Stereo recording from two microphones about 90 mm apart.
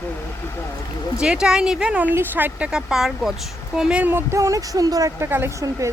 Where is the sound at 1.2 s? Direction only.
10° right (ahead or behind).